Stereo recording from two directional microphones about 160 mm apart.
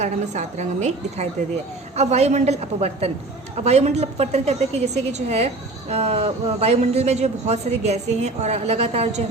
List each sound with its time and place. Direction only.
0.0 s speech: 45° right (ahead or behind)